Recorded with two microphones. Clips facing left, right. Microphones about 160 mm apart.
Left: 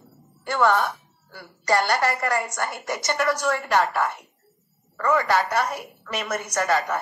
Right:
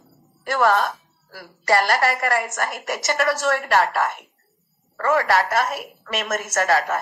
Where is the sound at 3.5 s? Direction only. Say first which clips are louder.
Right 2 dB; 70° right (ahead or behind).